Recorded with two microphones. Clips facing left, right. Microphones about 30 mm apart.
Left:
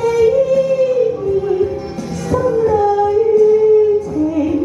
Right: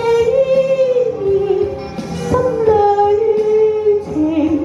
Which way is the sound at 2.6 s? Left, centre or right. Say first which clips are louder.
Right 4 dB; right.